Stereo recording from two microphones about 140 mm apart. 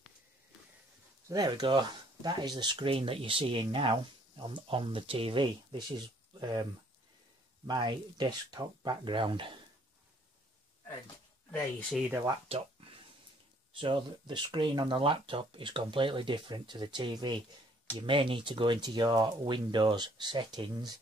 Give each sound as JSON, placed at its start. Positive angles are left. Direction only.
{"t": 1.3, "sound": "speech", "side_deg": -30}
{"t": 12.3, "sound": "speech", "side_deg": -40}
{"t": 13.7, "sound": "speech", "side_deg": -35}